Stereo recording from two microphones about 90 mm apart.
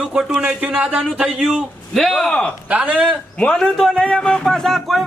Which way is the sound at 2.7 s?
15° right (ahead or behind).